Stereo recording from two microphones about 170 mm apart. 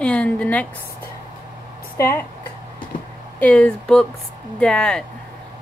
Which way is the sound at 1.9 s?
15° left (ahead or behind).